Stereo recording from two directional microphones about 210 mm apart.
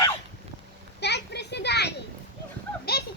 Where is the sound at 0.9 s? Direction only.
55° left (ahead or behind).